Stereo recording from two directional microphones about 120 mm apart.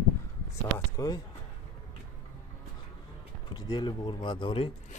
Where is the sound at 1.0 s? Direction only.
30° left (ahead or behind).